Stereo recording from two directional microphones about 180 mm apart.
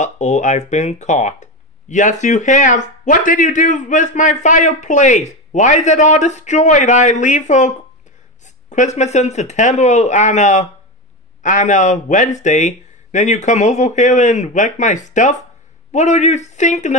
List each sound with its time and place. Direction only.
0.0 s speech: 40° left (ahead or behind)